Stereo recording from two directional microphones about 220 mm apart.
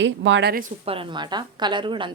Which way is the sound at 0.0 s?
55° right (ahead or behind).